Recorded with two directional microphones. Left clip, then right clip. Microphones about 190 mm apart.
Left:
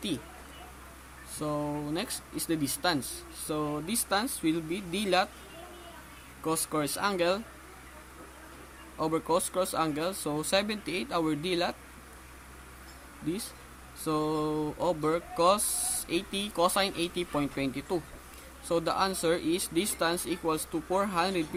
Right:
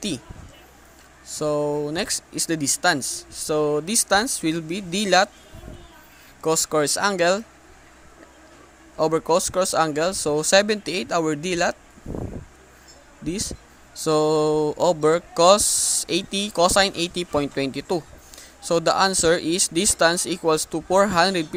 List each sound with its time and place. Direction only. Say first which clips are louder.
1.3 s speech: right 11 dB; 40° right (ahead or behind)
6.4 s speech: right 10 dB; 40° right (ahead or behind)
9.0 s speech: right 9 dB; 40° right (ahead or behind)
14.0 s speech: right 11 dB; 40° right (ahead or behind)